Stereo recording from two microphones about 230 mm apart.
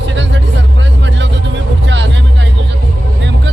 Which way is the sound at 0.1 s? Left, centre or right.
Right.